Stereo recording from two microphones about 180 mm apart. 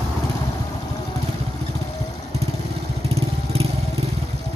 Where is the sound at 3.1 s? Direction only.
35° right (ahead or behind).